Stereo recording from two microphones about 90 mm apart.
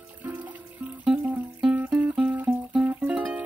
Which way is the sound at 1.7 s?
15° right (ahead or behind).